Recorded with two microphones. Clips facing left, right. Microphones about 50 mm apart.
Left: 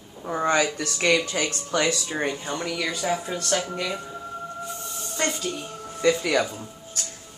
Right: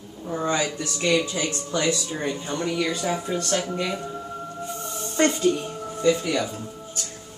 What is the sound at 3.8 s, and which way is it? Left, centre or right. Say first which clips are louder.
Speech: right 2 dB; centre.